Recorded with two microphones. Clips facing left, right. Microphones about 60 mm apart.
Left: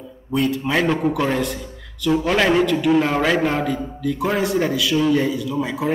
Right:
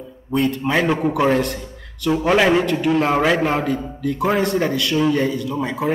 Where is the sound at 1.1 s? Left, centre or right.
Centre.